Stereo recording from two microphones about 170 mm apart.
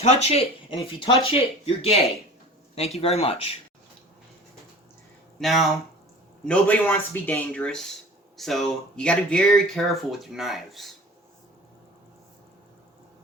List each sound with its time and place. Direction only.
0.0 s speech: 40° left (ahead or behind)
5.4 s speech: centre (ahead or behind)